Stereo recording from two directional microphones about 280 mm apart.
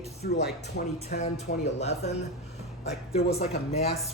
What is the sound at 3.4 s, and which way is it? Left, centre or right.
Speech, left.